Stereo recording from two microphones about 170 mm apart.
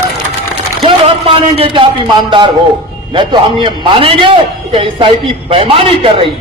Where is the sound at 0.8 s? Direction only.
30° right (ahead or behind).